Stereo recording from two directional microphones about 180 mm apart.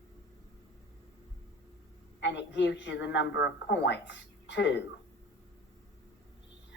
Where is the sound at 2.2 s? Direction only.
75° left (ahead or behind).